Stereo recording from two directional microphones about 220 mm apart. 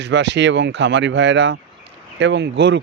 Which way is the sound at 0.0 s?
55° right (ahead or behind).